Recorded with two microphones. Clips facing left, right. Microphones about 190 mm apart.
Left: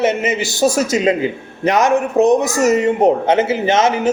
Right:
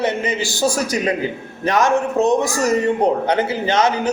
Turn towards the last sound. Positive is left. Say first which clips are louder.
# left 3 dB
turn(degrees=25)  # may be behind; listen again after turning